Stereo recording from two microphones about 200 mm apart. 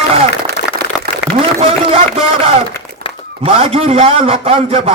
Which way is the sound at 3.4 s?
30° right (ahead or behind).